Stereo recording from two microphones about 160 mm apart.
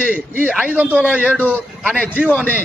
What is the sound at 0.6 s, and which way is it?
A man's voice, 10° right (ahead or behind).